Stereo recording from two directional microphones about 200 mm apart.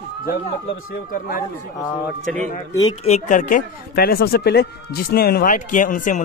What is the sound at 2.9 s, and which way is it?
Speech, 35° left (ahead or behind).